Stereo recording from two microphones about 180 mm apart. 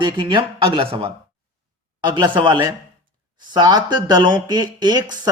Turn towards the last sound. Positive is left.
turn(degrees=-20)  # may be behind; listen again after turning